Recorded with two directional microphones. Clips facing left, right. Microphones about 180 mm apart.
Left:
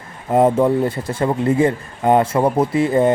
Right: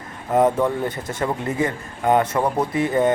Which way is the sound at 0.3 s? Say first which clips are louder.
Left 4 dB; 30° left (ahead or behind).